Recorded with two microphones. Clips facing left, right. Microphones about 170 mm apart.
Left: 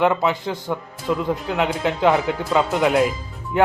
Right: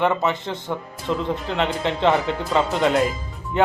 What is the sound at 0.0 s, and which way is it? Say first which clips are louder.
Speech: left 2 dB; 5° left (ahead or behind).